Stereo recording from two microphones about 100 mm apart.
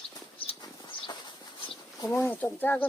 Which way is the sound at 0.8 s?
50° left (ahead or behind).